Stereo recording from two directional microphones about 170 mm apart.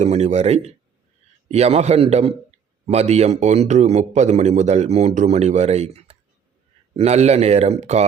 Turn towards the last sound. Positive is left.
turn(degrees=-40)  # may be behind; listen again after turning